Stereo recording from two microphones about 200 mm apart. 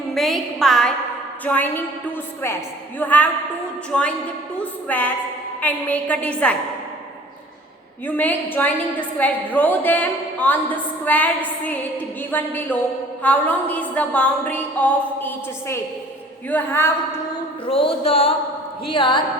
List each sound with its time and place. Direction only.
0.1 s a woman's voice: centre (ahead or behind)
3.0 s a woman's voice: 10° left (ahead or behind)
8.0 s a woman's voice: 10° left (ahead or behind)
17.7 s a sound: 25° left (ahead or behind)